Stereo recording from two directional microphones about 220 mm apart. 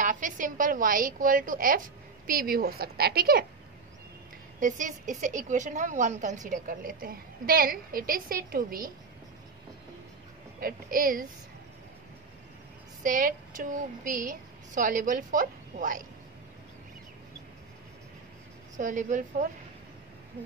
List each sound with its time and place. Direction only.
0.0 s a woman's voice: 35° right (ahead or behind)
4.6 s a woman's voice: 35° right (ahead or behind)
10.6 s a woman's voice: 40° right (ahead or behind)
13.0 s a woman's voice: 35° right (ahead or behind)
18.8 s a woman's voice: 35° right (ahead or behind)